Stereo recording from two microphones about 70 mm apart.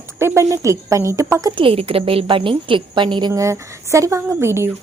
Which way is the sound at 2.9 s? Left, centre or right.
Right.